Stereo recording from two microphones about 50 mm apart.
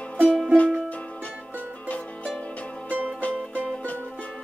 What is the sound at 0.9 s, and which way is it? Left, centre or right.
Music, left.